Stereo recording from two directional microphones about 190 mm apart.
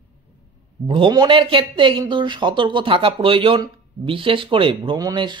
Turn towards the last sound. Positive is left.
turn(degrees=-20)  # may be behind; listen again after turning